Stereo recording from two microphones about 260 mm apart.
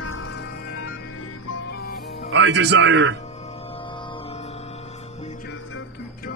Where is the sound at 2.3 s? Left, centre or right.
Right.